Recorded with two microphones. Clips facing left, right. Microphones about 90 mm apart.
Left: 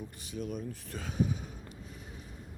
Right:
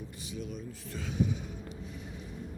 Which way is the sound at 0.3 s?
50° left (ahead or behind).